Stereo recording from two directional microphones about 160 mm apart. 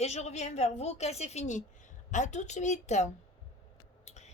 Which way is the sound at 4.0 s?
45° left (ahead or behind).